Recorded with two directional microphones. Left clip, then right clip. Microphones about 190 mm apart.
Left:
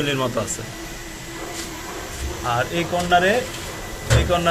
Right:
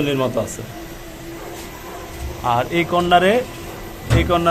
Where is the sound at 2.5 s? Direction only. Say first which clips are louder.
Right 4 dB; 25° right (ahead or behind).